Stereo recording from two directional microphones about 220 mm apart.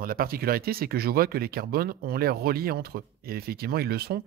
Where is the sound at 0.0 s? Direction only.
40° right (ahead or behind).